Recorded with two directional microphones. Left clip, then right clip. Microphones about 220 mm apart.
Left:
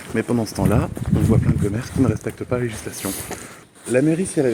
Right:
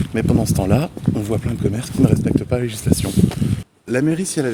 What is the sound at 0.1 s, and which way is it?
Speech, 55° right (ahead or behind).